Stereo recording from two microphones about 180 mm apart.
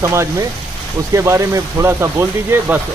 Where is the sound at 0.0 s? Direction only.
15° right (ahead or behind).